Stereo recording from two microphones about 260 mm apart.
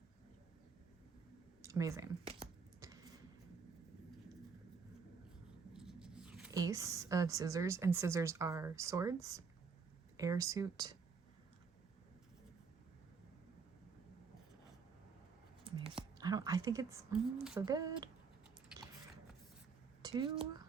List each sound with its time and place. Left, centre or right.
1.6 s computer keyboard: centre
5.7 s speech: centre
15.8 s speech: centre
20.0 s speech: centre